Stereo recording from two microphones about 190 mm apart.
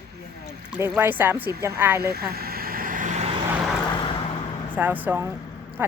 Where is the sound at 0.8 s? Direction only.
10° right (ahead or behind).